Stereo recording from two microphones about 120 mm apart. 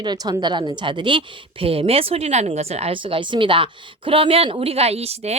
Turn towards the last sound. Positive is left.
turn(degrees=-60)  # may be behind; listen again after turning